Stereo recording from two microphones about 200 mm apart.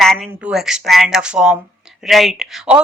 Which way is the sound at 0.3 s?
5° right (ahead or behind).